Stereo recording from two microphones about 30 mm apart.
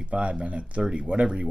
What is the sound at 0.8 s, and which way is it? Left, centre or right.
Speech, right.